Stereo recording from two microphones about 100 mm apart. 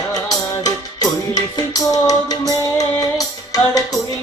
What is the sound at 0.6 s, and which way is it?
Music, 40° left (ahead or behind).